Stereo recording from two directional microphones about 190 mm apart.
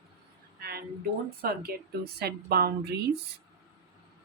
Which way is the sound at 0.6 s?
55° right (ahead or behind).